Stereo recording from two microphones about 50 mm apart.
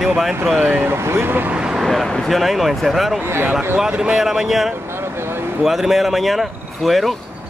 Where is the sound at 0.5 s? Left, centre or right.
Right.